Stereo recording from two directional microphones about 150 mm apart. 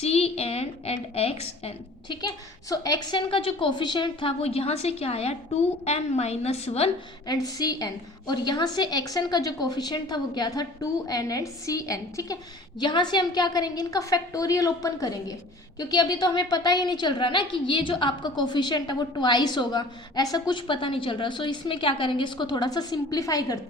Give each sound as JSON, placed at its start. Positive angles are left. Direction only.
{"t": 0.0, "sound": "a woman's voice", "side_deg": 40}
{"t": 2.2, "sound": "a woman's voice", "side_deg": 25}
{"t": 7.3, "sound": "a woman's voice", "side_deg": 25}